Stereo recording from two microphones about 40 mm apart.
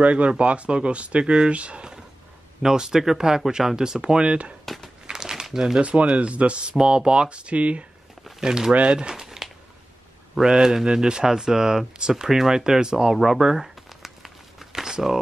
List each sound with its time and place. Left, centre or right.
0.0 s speech: right
2.6 s speech: centre
4.6 s crumpling: centre
5.0 s crumpling: centre
5.8 s speech: right
6.7 s speech: centre
8.4 s speech: centre
8.7 s speech: right
9.1 s a sound: centre
10.4 s speech: centre
13.6 s crumpling: centre
14.7 s a sound: centre